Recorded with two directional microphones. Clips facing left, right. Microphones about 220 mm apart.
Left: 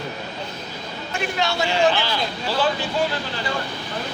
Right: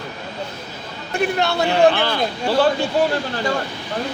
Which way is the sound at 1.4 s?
60° right (ahead or behind).